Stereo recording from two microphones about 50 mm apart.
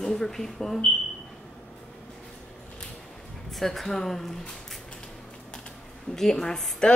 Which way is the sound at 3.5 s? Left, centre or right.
Centre.